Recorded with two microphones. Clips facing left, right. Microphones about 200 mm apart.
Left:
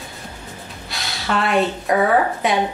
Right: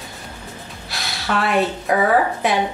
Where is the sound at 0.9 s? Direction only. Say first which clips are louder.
Even; centre (ahead or behind).